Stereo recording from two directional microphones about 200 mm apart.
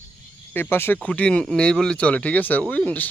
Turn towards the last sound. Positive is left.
turn(degrees=5)  # may be behind; listen again after turning